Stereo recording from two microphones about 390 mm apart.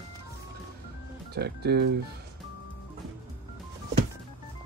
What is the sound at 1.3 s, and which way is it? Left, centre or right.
Speech, right.